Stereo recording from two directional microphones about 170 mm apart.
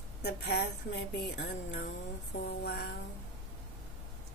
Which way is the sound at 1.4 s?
90° left.